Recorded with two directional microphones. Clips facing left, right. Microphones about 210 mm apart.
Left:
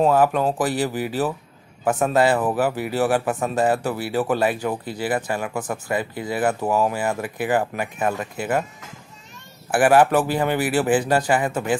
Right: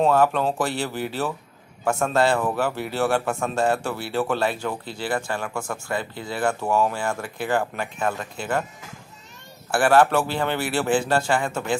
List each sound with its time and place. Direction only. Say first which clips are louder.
0.0 s speech: left 2 dB; 5° left (ahead or behind)
5.5 s speech: left 3 dB; 20° left (ahead or behind)
5.9 s speech: left 4 dB; 10° left (ahead or behind)
9.7 s speech: left 2 dB; 10° left (ahead or behind)